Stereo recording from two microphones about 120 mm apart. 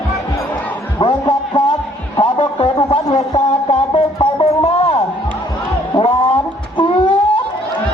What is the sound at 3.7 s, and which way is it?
Music, 55° left (ahead or behind).